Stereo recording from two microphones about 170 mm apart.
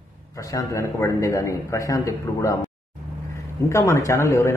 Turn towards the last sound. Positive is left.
turn(degrees=15)  # may be behind; listen again after turning